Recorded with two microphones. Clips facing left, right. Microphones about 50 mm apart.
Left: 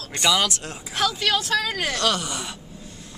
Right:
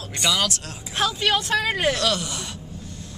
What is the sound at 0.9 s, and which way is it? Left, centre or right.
Speech, right.